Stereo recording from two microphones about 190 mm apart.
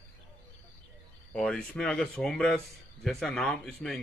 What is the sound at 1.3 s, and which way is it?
A man's voice, 5° left (ahead or behind).